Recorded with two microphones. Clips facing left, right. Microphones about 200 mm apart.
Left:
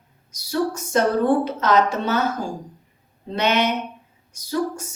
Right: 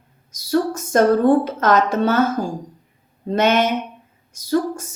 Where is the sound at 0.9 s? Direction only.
50° right (ahead or behind).